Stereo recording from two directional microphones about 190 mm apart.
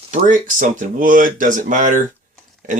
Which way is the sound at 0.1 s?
45° right (ahead or behind).